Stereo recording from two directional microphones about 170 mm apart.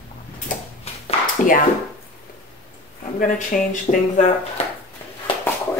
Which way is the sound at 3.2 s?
50° left (ahead or behind).